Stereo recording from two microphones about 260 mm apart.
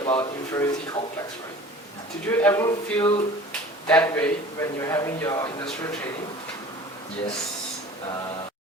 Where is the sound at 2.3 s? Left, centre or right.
Centre.